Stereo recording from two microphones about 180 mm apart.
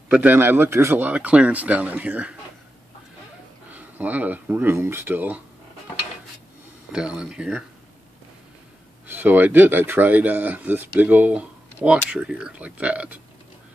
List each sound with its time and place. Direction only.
0.1 s speech: 10° right (ahead or behind)
3.7 s speech: 10° right (ahead or behind)
6.9 s speech: 5° right (ahead or behind)
9.0 s speech: 10° right (ahead or behind)